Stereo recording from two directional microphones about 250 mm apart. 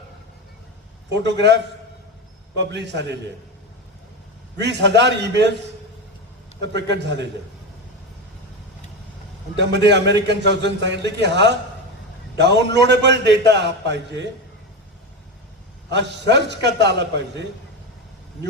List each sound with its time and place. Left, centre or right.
1.1 s a man's voice: right
2.6 s a man's voice: right
4.6 s a man's voice: right
6.6 s a man's voice: right
9.6 s a man's voice: right
15.9 s a man's voice: right